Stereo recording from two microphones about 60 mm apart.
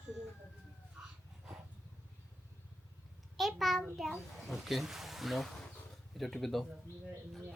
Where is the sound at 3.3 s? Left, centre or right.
Centre.